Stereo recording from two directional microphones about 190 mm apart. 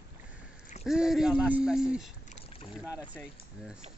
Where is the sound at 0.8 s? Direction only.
5° right (ahead or behind).